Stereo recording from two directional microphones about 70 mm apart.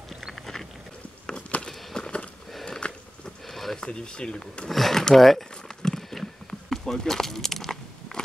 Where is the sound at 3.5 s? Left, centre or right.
Centre.